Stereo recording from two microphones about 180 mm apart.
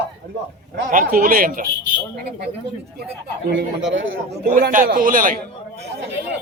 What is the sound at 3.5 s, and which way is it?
Speech, 85° right.